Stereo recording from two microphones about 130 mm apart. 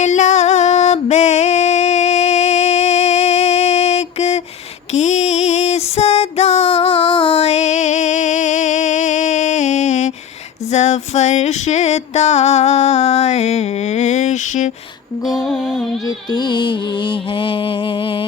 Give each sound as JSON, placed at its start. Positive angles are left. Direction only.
{"t": 0.0, "sound": "music", "side_deg": 65}
{"t": 4.9, "sound": "female singing", "side_deg": 60}
{"t": 10.7, "sound": "music", "side_deg": 60}
{"t": 15.3, "sound": "music", "side_deg": 0}
{"t": 16.0, "sound": "music", "side_deg": 35}